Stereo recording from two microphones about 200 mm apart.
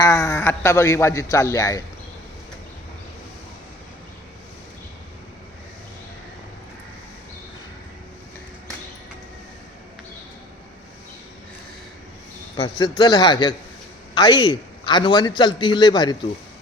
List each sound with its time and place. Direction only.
0.0 s a man's voice: 15° left (ahead or behind)
12.5 s a man's voice: 20° left (ahead or behind)